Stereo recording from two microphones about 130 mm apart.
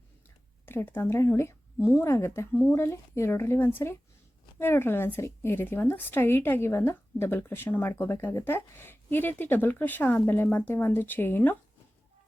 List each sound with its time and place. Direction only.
0.6 s speech: 15° left (ahead or behind)